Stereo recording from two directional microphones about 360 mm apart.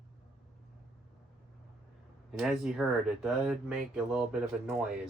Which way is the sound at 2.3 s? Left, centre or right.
Centre.